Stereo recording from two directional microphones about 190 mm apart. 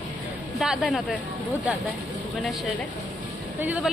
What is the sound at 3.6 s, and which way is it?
Speech, 10° right (ahead or behind).